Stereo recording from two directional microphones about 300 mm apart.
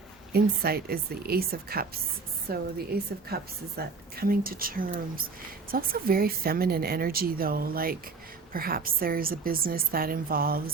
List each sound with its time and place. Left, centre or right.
0.3 s a woman's voice: right